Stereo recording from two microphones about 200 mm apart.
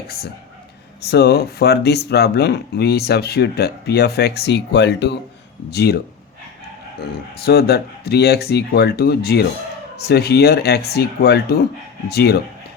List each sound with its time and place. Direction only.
1.0 s speech: 55° left (ahead or behind)
7.0 s speech: 50° left (ahead or behind)